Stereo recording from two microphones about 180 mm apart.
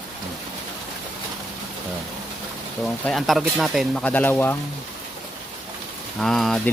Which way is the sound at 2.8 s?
Centre (ahead or behind).